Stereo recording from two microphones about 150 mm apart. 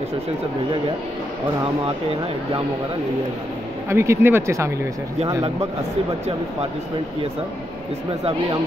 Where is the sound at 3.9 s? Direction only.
15° right (ahead or behind).